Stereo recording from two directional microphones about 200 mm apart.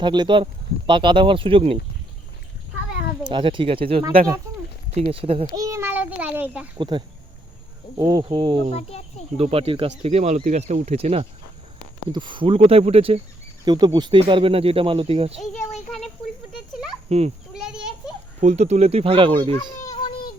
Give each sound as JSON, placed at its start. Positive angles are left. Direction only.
{"t": 0.0, "sound": "speech", "side_deg": -20}
{"t": 3.2, "sound": "speech", "side_deg": -25}
{"t": 5.5, "sound": "a child's voice", "side_deg": -15}
{"t": 6.7, "sound": "speech", "side_deg": -20}
{"t": 8.7, "sound": "speech", "side_deg": 30}
{"t": 9.4, "sound": "speech", "side_deg": -30}
{"t": 17.1, "sound": "speech", "side_deg": -30}
{"t": 17.5, "sound": "a sound", "side_deg": -5}
{"t": 18.3, "sound": "speech", "side_deg": -35}
{"t": 19.8, "sound": "children playing", "side_deg": 20}